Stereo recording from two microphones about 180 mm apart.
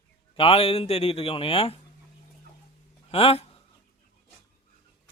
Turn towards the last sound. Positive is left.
turn(degrees=30)  # may be behind; listen again after turning